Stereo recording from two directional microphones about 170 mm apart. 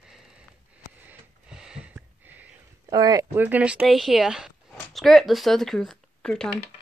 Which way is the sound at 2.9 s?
25° right (ahead or behind).